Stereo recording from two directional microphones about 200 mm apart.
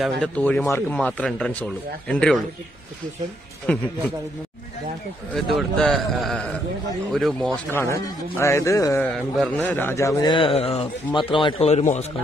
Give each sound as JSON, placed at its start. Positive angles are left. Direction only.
{"t": 0.0, "sound": "speech", "side_deg": 5}
{"t": 3.7, "sound": "speech", "side_deg": 5}
{"t": 5.3, "sound": "speech", "side_deg": 0}
{"t": 7.8, "sound": "a man's voice", "side_deg": 15}